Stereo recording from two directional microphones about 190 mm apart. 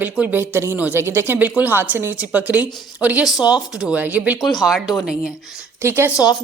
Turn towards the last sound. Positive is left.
turn(degrees=20)  # may be behind; listen again after turning